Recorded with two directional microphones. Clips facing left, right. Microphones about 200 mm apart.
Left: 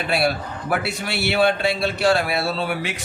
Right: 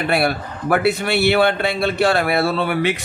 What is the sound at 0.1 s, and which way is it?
A man's voice, 55° right (ahead or behind).